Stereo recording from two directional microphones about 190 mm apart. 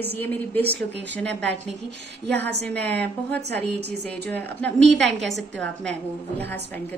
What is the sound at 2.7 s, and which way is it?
A woman's voice, 10° left (ahead or behind).